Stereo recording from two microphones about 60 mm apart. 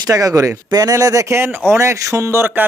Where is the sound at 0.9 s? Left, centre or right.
Right.